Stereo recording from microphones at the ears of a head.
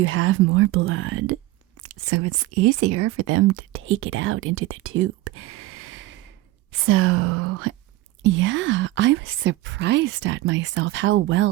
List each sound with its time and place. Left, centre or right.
0.0 s speech: right